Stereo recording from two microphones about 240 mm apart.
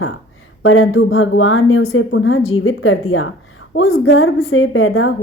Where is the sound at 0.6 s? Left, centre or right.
Left.